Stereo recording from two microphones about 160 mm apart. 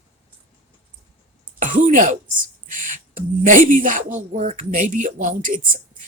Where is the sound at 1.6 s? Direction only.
55° right (ahead or behind).